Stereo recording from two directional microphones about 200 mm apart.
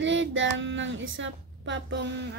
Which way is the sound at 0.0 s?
70° right (ahead or behind).